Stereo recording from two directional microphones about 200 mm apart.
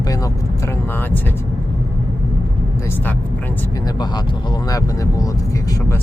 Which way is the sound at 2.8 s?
10° left (ahead or behind).